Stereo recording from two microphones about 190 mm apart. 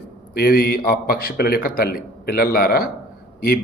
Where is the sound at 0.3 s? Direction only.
55° left (ahead or behind).